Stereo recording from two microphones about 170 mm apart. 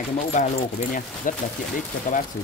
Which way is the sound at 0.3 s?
45° left (ahead or behind).